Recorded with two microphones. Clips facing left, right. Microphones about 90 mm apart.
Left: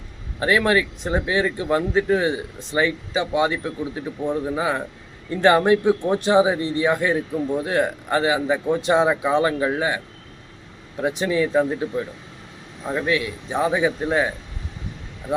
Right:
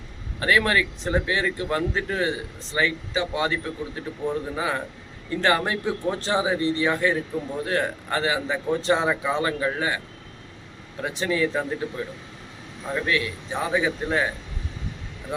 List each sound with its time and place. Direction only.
0.3 s speech: 20° left (ahead or behind)
11.0 s speech: 20° left (ahead or behind)